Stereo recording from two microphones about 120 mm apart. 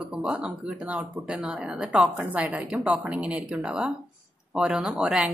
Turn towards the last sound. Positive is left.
turn(degrees=-5)  # may be behind; listen again after turning